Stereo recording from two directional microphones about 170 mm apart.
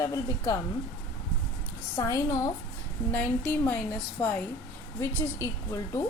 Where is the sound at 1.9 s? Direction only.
20° left (ahead or behind).